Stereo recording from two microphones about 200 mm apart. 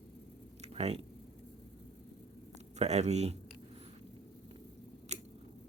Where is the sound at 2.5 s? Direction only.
35° right (ahead or behind).